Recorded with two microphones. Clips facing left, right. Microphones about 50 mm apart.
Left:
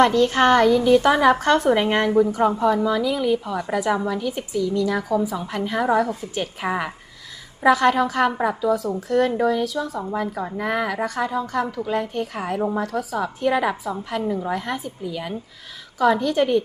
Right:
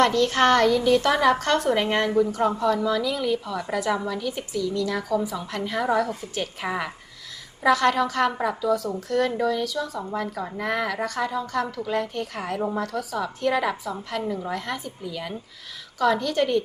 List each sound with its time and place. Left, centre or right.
0.0 s a woman's voice: centre